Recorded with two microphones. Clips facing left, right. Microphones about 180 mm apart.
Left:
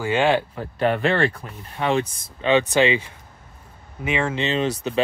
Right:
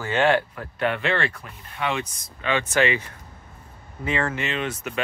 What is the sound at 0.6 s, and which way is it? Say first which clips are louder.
Speech: left 4 dB; 35° left (ahead or behind).